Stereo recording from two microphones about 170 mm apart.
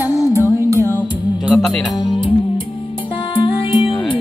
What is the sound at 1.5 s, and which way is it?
Music, 5° left (ahead or behind).